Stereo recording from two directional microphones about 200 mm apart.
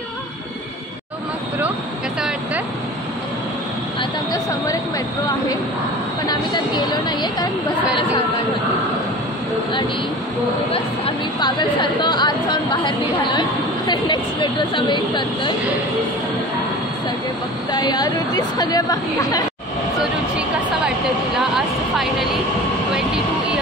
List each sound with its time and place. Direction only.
6.2 s a woman's voice: 20° left (ahead or behind)
10.7 s a woman's voice: 25° left (ahead or behind)
17.7 s a woman's voice: 20° left (ahead or behind)
20.0 s a sound: 5° right (ahead or behind)